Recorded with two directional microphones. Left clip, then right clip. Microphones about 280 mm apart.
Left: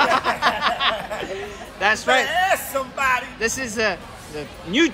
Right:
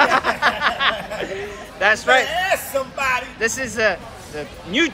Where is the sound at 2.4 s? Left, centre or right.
Centre.